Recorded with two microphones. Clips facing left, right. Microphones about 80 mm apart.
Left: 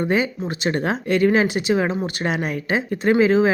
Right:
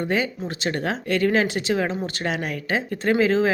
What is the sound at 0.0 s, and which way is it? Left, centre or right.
Speech, left.